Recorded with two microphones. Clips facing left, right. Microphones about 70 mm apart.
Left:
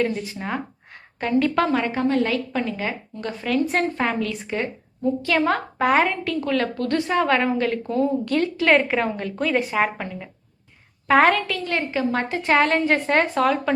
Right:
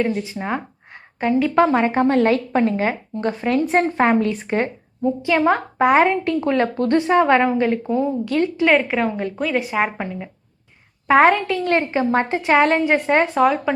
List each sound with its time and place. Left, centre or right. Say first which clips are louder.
0.0 s a woman's voice: right 2 dB; right
5.0 s a woman's voice: right 3 dB; centre
12.4 s speech: right 1 dB; centre